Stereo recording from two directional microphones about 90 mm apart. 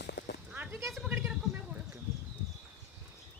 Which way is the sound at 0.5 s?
20° right (ahead or behind).